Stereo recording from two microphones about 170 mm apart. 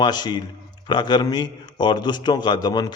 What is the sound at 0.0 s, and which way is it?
A man's voice, 25° left (ahead or behind).